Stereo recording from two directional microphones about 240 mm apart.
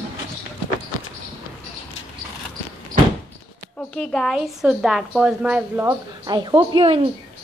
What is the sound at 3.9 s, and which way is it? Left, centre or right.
A woman's voice, centre.